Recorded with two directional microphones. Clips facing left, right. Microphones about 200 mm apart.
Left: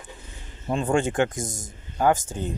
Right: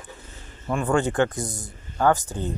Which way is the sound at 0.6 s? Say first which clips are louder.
Even; 20° left (ahead or behind).